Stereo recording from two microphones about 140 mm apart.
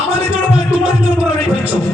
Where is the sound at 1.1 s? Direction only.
10° right (ahead or behind).